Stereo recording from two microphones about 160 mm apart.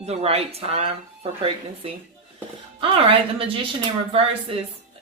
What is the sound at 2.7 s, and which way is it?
Speech, 35° right (ahead or behind).